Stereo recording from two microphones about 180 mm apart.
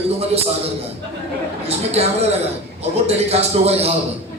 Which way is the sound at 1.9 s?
35° right (ahead or behind).